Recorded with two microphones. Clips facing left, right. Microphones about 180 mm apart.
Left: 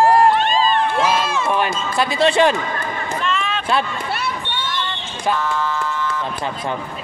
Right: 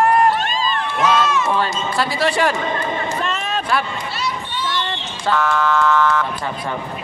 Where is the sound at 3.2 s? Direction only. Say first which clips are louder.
Left 1 dB; 40° right (ahead or behind).